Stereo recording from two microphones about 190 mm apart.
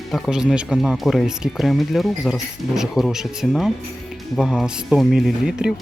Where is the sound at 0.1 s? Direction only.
Centre (ahead or behind).